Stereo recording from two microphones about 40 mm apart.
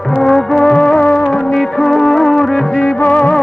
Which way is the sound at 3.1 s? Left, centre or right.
Left.